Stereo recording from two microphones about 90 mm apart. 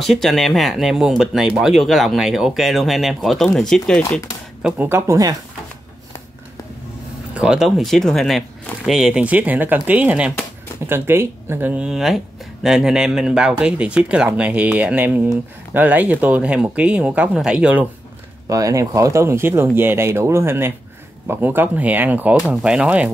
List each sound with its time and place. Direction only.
0.0 s speech: centre (ahead or behind)
4.6 s speech: 20° right (ahead or behind)
7.3 s speech: 10° right (ahead or behind)
10.9 s speech: 25° right (ahead or behind)
11.7 s speech: 10° right (ahead or behind)
18.5 s speech: 40° right (ahead or behind); by 23.1 s 15° right (ahead or behind)